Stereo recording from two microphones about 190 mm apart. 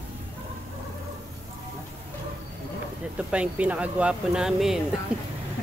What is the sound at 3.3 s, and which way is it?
Speech, 5° right (ahead or behind).